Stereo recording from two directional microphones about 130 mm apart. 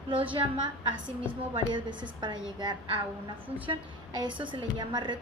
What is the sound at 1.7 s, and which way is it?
A woman's voice, 35° right (ahead or behind).